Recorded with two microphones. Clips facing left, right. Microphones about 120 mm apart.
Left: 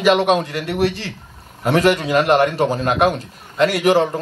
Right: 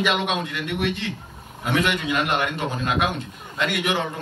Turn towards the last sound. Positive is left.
turn(degrees=35)  # may be behind; listen again after turning